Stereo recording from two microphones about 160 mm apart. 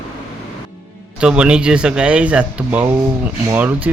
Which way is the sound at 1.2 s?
5° right (ahead or behind).